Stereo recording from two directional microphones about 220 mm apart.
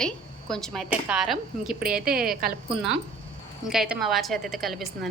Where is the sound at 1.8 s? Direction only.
40° right (ahead or behind).